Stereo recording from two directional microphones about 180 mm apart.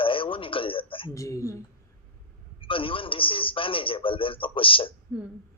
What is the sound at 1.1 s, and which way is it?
Speech, 15° left (ahead or behind).